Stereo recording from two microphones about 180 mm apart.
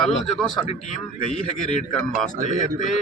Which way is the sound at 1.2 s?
40° left (ahead or behind).